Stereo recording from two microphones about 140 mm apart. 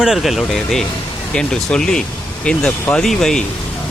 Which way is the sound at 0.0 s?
5° right (ahead or behind).